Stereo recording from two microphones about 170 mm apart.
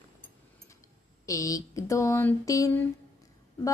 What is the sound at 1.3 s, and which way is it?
Speech, 20° left (ahead or behind).